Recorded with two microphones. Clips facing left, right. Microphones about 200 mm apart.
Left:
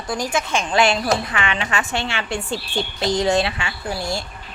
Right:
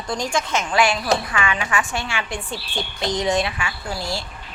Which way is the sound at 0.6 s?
25° left (ahead or behind).